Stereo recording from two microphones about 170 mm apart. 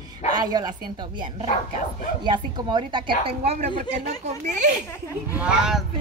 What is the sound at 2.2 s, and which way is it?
A woman's voice, 30° right (ahead or behind).